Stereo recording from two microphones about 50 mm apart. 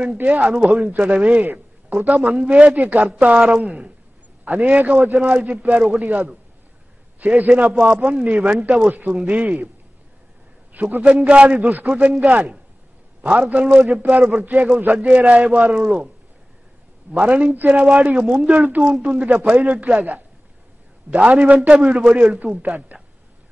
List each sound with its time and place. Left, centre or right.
0.2 s a man's voice: right
10.7 s a sound: right
11.0 s a man's voice: right
17.1 s a man's voice: right
22.1 s a man's voice: right